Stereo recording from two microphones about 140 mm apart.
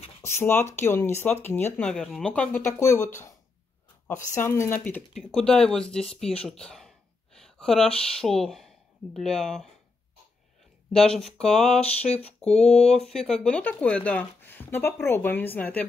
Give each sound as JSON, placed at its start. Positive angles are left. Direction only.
{"t": 0.2, "sound": "speech", "side_deg": 20}
{"t": 1.9, "sound": "speech", "side_deg": 5}
{"t": 4.4, "sound": "speech", "side_deg": 15}
{"t": 11.0, "sound": "speech", "side_deg": 5}
{"t": 11.8, "sound": "speech", "side_deg": 50}
{"t": 12.4, "sound": "speech", "side_deg": 5}